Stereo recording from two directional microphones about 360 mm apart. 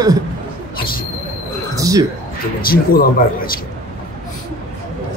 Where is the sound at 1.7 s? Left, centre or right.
Centre.